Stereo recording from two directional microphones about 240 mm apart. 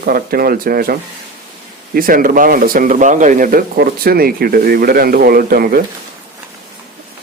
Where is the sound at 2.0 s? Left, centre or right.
Right.